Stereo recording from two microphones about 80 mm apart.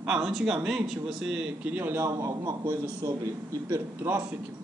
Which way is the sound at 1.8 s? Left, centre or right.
Right.